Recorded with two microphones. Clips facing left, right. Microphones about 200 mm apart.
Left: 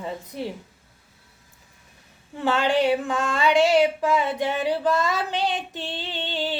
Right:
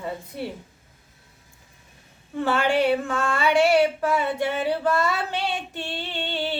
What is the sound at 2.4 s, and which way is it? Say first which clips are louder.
Female singing: even; 15° left (ahead or behind).